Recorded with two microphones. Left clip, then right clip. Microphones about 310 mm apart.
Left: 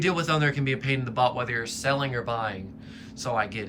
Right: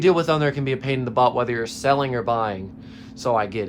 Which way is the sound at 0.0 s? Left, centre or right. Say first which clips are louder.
Right 6 dB; centre.